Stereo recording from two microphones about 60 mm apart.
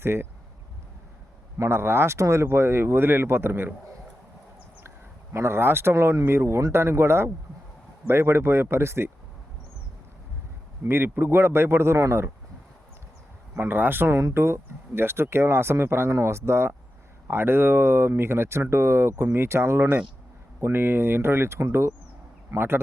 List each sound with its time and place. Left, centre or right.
0.0 s speech: right
1.5 s speech: right
5.3 s speech: right
10.8 s speech: right
13.6 s speech: right